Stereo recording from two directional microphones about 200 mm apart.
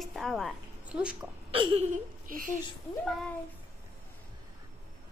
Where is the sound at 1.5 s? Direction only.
25° right (ahead or behind).